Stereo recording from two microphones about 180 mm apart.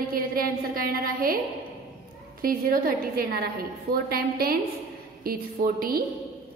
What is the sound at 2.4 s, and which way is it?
A woman's voice, 55° right (ahead or behind).